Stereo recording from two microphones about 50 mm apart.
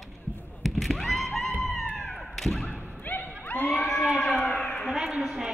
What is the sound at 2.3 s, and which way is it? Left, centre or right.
Thump, centre.